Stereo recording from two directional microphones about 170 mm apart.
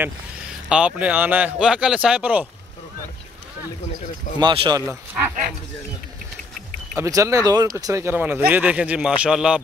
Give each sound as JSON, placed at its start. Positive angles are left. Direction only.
{"t": 0.7, "sound": "speech", "side_deg": -5}
{"t": 4.4, "sound": "speech", "side_deg": -25}
{"t": 7.0, "sound": "speech", "side_deg": -20}